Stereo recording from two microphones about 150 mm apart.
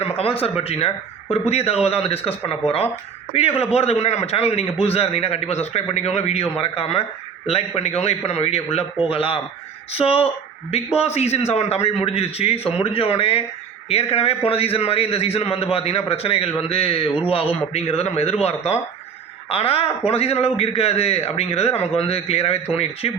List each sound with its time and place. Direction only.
0.0 s a man's voice: 40° left (ahead or behind)